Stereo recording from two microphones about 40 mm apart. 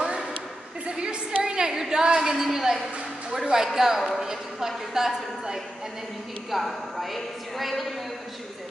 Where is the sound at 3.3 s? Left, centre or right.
Centre.